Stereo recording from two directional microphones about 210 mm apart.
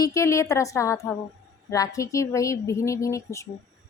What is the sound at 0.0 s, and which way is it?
A woman's voice, 15° left (ahead or behind).